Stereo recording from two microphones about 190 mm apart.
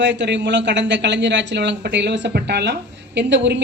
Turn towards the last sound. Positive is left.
turn(degrees=-70)  # may be behind; listen again after turning